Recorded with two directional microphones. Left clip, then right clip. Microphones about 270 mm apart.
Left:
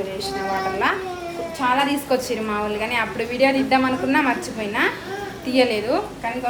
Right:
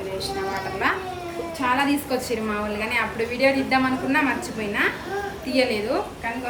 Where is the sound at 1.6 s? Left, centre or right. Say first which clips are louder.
Left 2 dB; centre.